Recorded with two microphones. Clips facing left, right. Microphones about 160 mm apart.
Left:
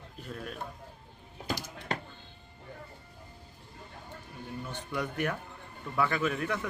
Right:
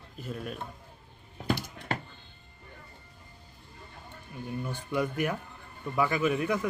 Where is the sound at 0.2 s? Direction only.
5° right (ahead or behind).